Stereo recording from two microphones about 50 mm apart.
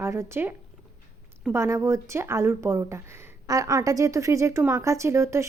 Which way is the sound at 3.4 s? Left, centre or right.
Right.